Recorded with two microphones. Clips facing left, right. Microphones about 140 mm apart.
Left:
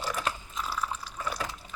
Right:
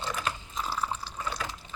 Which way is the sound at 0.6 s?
30° right (ahead or behind).